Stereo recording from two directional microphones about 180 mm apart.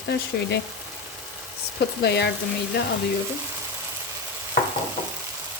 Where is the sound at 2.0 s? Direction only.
70° left (ahead or behind).